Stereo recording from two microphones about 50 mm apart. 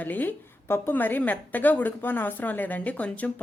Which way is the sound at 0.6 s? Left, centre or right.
Left.